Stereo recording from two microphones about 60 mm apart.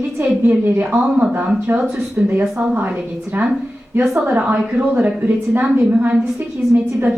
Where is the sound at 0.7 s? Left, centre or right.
Right.